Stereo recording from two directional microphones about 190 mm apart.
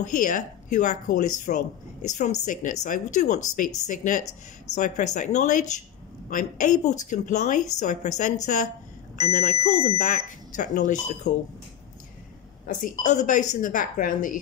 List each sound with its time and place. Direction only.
0.2 s speech: 40° left (ahead or behind)
12.6 s speech: 45° left (ahead or behind)